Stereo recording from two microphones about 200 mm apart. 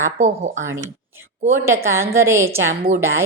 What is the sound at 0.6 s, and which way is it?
A woman's voice, 15° right (ahead or behind).